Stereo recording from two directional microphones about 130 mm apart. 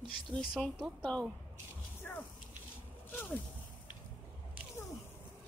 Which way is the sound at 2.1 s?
10° left (ahead or behind).